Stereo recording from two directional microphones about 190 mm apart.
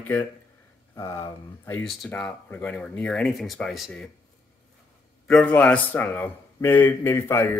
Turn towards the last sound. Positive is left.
turn(degrees=10)  # may be behind; listen again after turning